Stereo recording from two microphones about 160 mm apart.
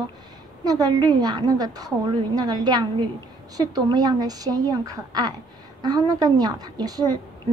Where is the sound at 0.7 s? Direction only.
25° right (ahead or behind).